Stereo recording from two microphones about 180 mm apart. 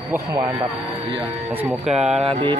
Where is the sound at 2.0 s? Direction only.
Centre (ahead or behind).